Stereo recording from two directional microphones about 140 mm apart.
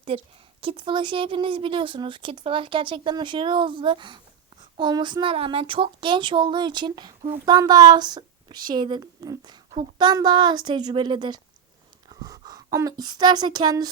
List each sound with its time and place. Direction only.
0.1 s a woman's voice: 45° right (ahead or behind)